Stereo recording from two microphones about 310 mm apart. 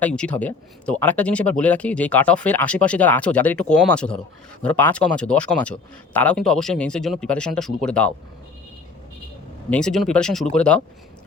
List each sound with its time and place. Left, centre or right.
0.0 s speech: centre
9.6 s speech: centre